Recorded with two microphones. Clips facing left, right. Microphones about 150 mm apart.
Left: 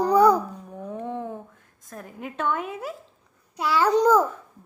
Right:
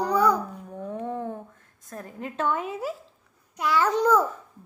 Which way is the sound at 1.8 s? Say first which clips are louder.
Right 1 dB; centre (ahead or behind).